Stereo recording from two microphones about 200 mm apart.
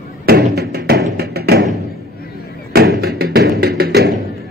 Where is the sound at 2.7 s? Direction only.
50° right (ahead or behind).